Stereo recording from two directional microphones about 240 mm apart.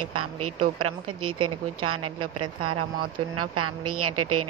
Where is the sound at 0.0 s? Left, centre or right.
Right.